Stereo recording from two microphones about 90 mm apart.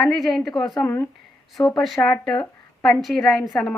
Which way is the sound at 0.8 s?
25° left (ahead or behind).